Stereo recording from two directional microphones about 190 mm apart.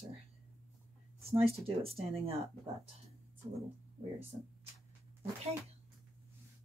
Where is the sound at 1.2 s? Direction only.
30° right (ahead or behind).